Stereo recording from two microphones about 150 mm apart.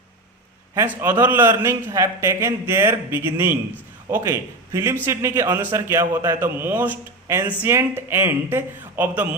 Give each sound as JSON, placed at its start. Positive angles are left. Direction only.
{"t": 0.7, "sound": "a man's voice", "side_deg": -15}